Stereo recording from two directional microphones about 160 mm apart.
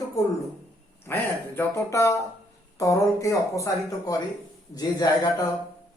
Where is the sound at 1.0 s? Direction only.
15° left (ahead or behind).